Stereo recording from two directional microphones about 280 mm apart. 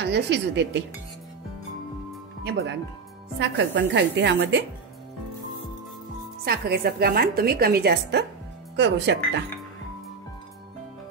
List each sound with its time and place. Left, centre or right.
0.0 s a woman's voice: right
2.4 s a woman's voice: right
6.4 s a woman's voice: right